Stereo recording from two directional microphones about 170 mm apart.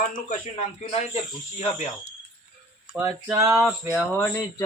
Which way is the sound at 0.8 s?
40° left (ahead or behind).